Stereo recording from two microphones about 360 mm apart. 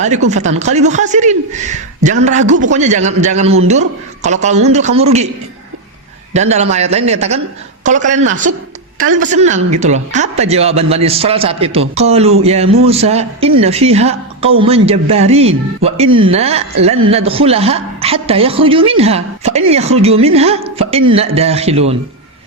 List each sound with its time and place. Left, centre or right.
0.0 s speech: centre
6.3 s a woman's voice: centre